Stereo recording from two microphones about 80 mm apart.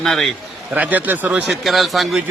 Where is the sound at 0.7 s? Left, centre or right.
Centre.